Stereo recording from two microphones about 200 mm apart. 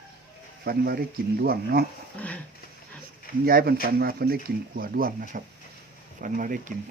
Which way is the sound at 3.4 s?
50° right (ahead or behind).